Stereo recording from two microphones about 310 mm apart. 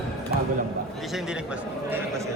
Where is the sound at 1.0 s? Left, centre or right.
Centre.